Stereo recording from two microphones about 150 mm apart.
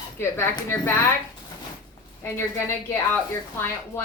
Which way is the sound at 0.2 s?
15° left (ahead or behind).